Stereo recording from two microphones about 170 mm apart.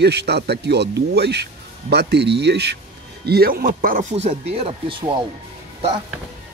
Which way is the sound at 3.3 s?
65° right (ahead or behind).